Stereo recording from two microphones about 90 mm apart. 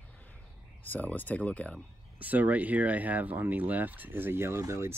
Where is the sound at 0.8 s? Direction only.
20° left (ahead or behind).